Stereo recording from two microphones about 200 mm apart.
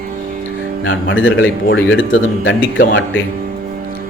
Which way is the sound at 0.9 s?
75° left (ahead or behind).